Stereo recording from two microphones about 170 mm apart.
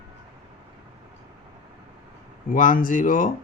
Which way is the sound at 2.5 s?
50° left (ahead or behind).